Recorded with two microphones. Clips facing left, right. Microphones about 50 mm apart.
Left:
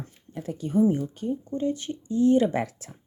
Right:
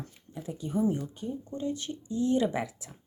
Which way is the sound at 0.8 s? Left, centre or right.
Left.